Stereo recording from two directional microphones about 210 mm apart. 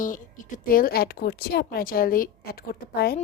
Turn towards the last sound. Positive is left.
turn(degrees=50)  # may be behind; listen again after turning